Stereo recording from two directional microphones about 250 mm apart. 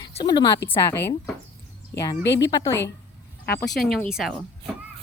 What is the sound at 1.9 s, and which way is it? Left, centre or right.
Speech, left.